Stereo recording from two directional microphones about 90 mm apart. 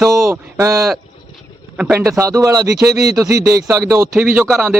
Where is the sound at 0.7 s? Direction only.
5° right (ahead or behind).